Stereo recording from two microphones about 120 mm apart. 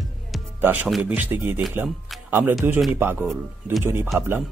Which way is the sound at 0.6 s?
15° right (ahead or behind).